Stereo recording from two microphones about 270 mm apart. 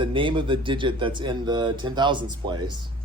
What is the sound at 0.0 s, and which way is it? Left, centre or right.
Speech, centre.